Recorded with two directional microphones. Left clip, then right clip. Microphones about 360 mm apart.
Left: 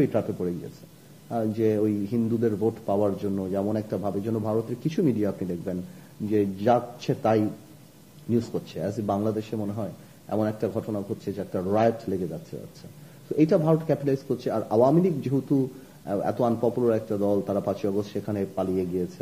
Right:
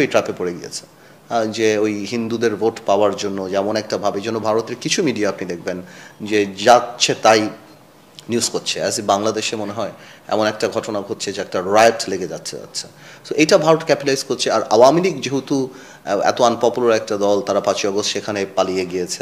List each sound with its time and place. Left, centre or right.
0.0 s a man's voice: centre
13.4 s a man's voice: centre